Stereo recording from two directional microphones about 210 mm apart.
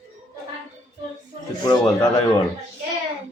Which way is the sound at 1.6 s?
20° left (ahead or behind).